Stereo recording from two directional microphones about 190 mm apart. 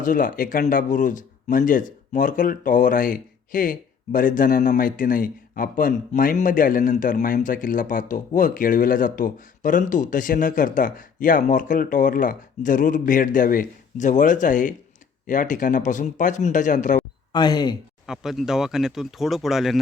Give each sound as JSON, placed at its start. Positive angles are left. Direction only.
{"t": 0.0, "sound": "speech", "side_deg": 45}
{"t": 17.3, "sound": "speech", "side_deg": 20}
{"t": 18.0, "sound": "speech", "side_deg": 0}